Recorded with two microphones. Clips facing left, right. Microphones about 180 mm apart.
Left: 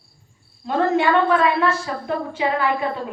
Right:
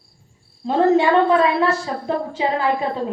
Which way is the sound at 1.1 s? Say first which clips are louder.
Right 2 dB; 30° right (ahead or behind).